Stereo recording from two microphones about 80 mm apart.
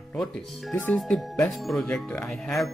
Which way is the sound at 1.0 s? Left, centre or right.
Centre.